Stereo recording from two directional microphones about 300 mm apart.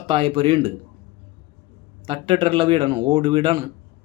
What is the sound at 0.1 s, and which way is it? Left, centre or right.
Speech, centre.